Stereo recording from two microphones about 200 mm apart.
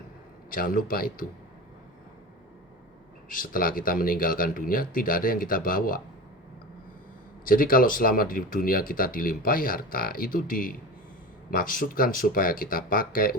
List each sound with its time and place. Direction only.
0.5 s speech: 45° left (ahead or behind)
3.2 s speech: 45° left (ahead or behind)
7.4 s speech: 45° left (ahead or behind)